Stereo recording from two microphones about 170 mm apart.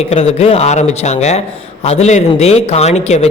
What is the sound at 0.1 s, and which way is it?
Speech, 35° left (ahead or behind).